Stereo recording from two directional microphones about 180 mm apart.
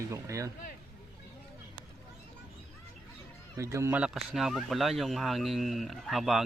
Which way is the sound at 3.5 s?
15° right (ahead or behind).